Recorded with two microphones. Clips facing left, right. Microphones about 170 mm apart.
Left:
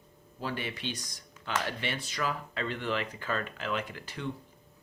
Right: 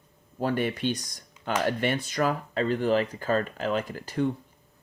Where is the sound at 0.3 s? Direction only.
50° right (ahead or behind).